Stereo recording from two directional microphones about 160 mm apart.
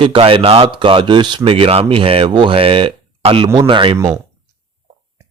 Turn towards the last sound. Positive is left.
turn(degrees=-30)  # may be behind; listen again after turning